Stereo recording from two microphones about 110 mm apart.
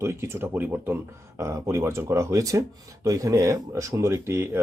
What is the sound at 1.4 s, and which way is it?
Speech, 30° right (ahead or behind).